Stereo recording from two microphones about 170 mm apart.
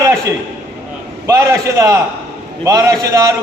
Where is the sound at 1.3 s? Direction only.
20° right (ahead or behind).